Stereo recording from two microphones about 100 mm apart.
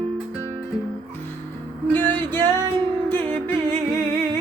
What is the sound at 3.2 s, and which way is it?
Music, 45° right (ahead or behind).